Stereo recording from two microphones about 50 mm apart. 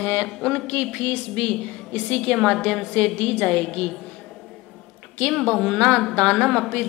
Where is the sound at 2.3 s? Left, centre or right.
Centre.